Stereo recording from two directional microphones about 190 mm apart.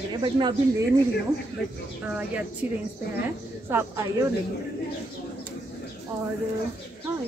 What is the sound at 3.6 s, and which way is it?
Speech, 15° right (ahead or behind).